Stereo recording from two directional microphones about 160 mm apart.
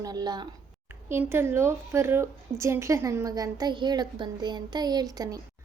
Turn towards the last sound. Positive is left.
turn(degrees=-25)  # may be behind; listen again after turning